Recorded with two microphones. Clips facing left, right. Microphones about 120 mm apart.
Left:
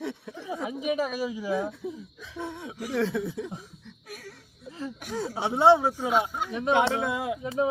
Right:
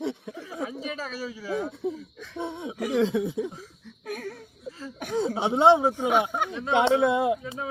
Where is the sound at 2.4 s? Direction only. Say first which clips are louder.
Right 4 dB; 20° right (ahead or behind).